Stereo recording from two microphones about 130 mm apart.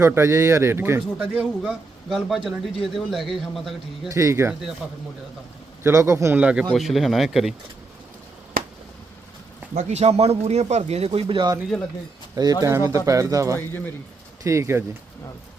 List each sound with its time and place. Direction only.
0.0 s a man's voice: 20° right (ahead or behind); by 4.1 s centre (ahead or behind)
4.1 s a man's voice: 25° right (ahead or behind)
5.8 s a man's voice: 20° right (ahead or behind)
6.4 s a man's voice: 10° right (ahead or behind)
9.7 s speech: 55° right (ahead or behind)
12.6 s a man's voice: 20° right (ahead or behind)